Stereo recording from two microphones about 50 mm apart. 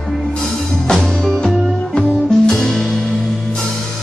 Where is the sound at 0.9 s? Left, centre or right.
Centre.